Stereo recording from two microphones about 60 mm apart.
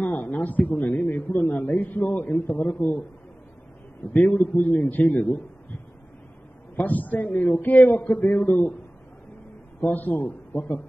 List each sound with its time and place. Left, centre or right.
0.0 s a sound: left
0.3 s a man's voice: left
4.1 s a man's voice: left
6.8 s a man's voice: left
9.8 s a man's voice: left